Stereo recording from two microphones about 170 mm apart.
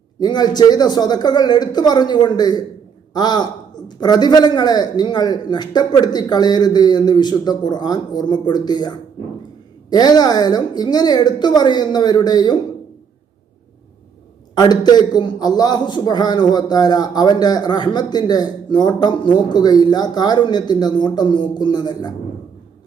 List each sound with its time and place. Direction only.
0.2 s a man's voice: 25° left (ahead or behind)
14.5 s a man's voice: 25° left (ahead or behind)